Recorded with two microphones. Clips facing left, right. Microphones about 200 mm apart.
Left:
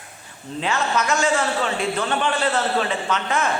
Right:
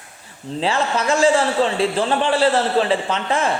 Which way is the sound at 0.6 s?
30° right (ahead or behind).